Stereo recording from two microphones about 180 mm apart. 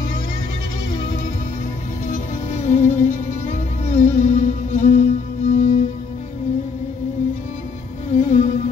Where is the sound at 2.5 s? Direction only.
40° left (ahead or behind).